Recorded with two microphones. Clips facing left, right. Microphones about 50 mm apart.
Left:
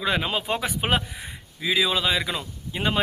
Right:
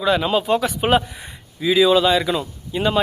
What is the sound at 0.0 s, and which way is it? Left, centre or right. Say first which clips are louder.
Speech: right 7 dB; centre.